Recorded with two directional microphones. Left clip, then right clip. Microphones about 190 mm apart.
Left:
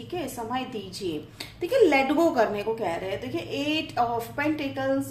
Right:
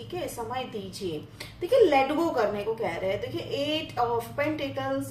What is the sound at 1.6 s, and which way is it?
A woman's voice, 50° left (ahead or behind).